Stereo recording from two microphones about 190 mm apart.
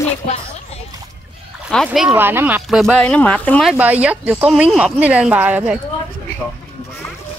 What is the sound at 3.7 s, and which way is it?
Speech, 5° right (ahead or behind).